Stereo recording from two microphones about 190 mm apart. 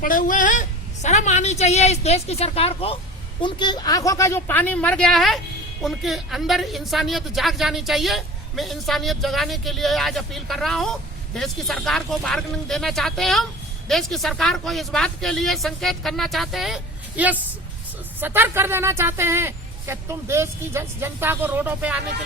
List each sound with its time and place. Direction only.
0.0 s a woman's voice: 45° left (ahead or behind); by 22.0 s 5° right (ahead or behind)